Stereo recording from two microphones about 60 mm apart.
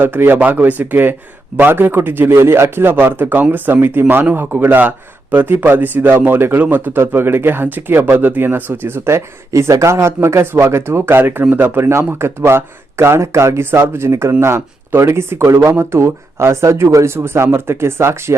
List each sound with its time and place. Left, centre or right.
0.0 s speech: right
9.5 s speech: right